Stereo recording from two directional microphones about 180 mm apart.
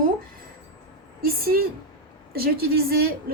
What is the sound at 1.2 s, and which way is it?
A woman's voice, 55° right (ahead or behind).